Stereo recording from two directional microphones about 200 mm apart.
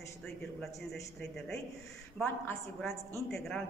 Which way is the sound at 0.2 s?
5° left (ahead or behind).